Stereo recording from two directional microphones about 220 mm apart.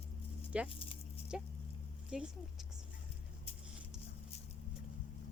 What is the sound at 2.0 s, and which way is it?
Speech, 5° right (ahead or behind).